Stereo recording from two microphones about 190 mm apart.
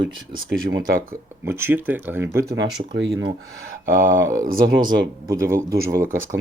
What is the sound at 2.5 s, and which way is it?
Speech, 75° right (ahead or behind).